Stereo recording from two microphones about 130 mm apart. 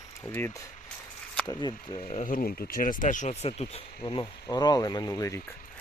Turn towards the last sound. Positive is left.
turn(degrees=25)  # may be behind; listen again after turning